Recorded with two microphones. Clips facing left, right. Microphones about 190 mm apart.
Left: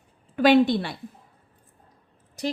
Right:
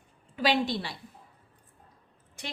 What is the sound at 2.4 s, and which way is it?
Speech, 40° left (ahead or behind).